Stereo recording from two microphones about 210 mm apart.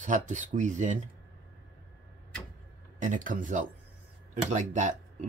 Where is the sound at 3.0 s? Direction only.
40° right (ahead or behind).